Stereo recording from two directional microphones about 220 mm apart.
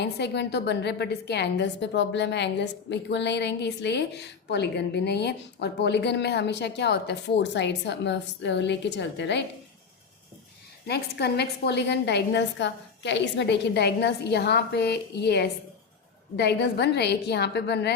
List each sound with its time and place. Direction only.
0.0 s a woman's voice: 50° left (ahead or behind)
10.8 s a woman's voice: 50° left (ahead or behind)